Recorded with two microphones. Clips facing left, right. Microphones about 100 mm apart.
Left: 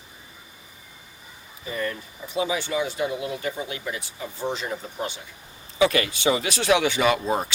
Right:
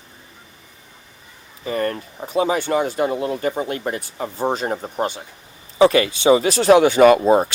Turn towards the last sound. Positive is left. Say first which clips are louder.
# right 10 dB
turn(degrees=-50)  # may be behind; listen again after turning